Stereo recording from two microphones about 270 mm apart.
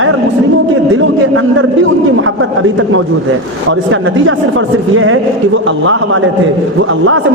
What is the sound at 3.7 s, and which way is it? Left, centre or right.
A man's voice, right.